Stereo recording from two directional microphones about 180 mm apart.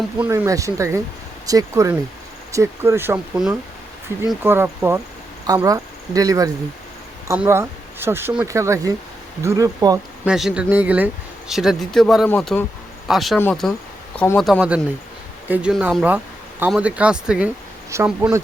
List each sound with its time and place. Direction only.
0.2 s speech: 15° right (ahead or behind)
10.2 s speech: 5° right (ahead or behind)